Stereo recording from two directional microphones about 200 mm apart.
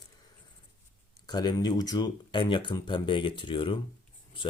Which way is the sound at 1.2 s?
20° left (ahead or behind).